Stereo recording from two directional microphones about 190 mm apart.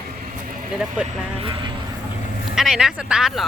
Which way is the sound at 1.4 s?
25° right (ahead or behind).